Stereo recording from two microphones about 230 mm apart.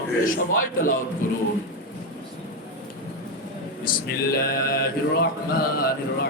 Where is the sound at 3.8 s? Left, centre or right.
Left.